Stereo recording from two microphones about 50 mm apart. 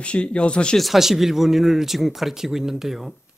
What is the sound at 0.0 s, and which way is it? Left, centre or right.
Speech, left.